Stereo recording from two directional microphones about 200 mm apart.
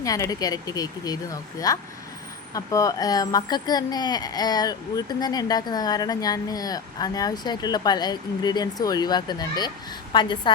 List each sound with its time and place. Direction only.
0.0 s speech: 15° left (ahead or behind)